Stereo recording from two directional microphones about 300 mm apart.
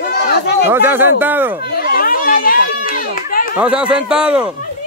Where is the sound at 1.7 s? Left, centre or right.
Left.